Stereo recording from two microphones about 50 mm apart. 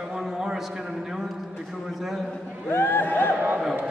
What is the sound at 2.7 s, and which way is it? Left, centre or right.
Speech, left.